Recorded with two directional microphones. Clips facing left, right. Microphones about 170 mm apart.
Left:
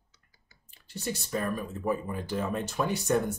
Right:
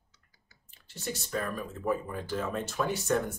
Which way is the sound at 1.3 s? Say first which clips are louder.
Left 2 dB; 15° left (ahead or behind).